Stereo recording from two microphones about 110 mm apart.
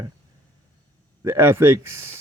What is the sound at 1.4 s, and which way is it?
Speech, 20° right (ahead or behind).